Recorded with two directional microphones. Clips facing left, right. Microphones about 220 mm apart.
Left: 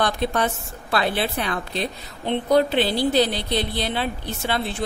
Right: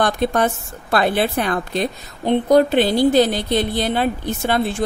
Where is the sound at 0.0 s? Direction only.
50° right (ahead or behind).